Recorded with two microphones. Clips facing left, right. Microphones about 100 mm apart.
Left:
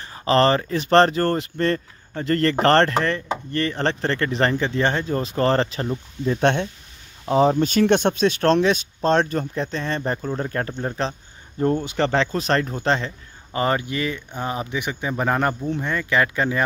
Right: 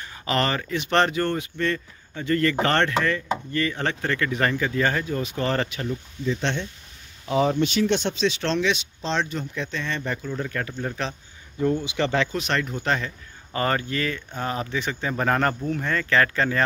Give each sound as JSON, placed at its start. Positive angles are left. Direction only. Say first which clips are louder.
{"t": 0.0, "sound": "speech", "louder": "left 7 dB", "side_deg": 35}
{"t": 6.2, "sound": "speech", "louder": "left 7 dB", "side_deg": 55}
{"t": 7.2, "sound": "speech", "louder": "left 4 dB", "side_deg": 35}
{"t": 11.6, "sound": "speech", "louder": "left 2 dB", "side_deg": 50}
{"t": 12.0, "sound": "a man's voice", "louder": "left 4 dB", "side_deg": 35}